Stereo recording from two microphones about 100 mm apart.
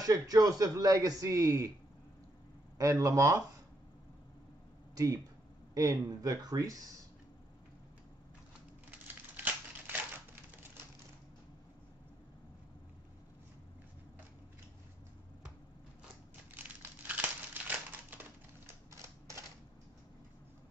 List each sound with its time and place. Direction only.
0.0 s a man's voice: 35° right (ahead or behind)
2.8 s a man's voice: 35° right (ahead or behind)
4.9 s a man's voice: 35° right (ahead or behind)
9.0 s crumpling: 20° right (ahead or behind)
16.5 s crumpling: 15° right (ahead or behind)
18.9 s typewriter: 30° right (ahead or behind)